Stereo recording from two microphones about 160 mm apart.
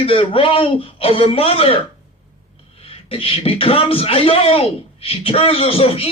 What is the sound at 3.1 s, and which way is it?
Speech, 35° left (ahead or behind).